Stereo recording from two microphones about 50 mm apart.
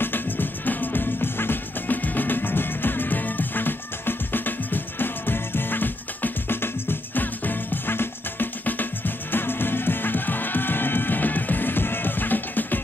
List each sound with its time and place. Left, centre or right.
0.0 s music: left